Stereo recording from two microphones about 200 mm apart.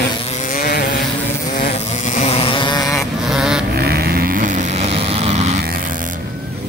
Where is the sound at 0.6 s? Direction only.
45° left (ahead or behind).